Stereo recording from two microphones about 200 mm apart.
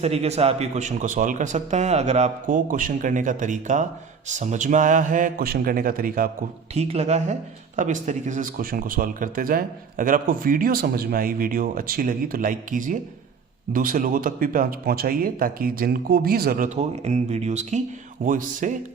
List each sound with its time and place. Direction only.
0.0 s a man's voice: 30° right (ahead or behind)
6.7 s a man's voice: 30° right (ahead or behind)